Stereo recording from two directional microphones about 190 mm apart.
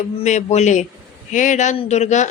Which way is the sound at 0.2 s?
40° left (ahead or behind).